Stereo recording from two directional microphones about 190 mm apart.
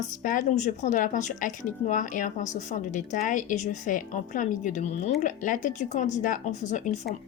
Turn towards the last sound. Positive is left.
turn(degrees=40)  # may be behind; listen again after turning